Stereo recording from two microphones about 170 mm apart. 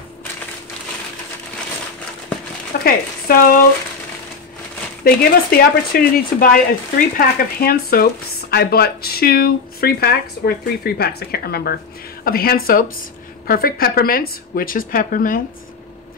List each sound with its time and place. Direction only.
2.8 s speech: 60° left (ahead or behind)
5.0 s speech: 65° left (ahead or behind)